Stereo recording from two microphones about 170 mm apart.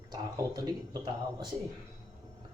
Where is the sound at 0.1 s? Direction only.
20° right (ahead or behind).